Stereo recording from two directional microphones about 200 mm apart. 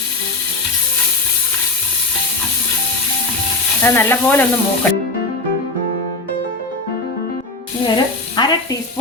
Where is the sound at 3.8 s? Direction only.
10° left (ahead or behind).